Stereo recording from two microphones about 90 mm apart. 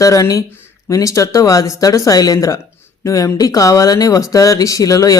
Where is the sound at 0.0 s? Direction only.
40° left (ahead or behind).